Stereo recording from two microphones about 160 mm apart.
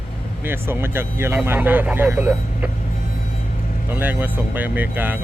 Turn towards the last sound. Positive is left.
turn(degrees=-10)  # may be behind; listen again after turning